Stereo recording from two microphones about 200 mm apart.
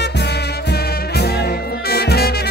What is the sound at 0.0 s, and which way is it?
Music, 55° left (ahead or behind).